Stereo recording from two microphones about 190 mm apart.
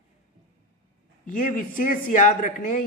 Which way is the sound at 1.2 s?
45° left (ahead or behind).